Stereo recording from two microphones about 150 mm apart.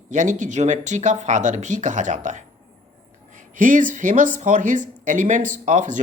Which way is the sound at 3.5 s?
60° right (ahead or behind).